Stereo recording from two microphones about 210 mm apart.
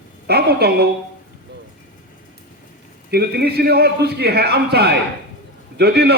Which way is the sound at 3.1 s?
50° right (ahead or behind).